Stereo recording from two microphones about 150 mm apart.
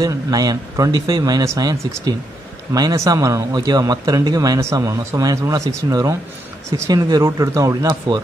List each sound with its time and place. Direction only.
0.0 s a man's voice: 25° right (ahead or behind)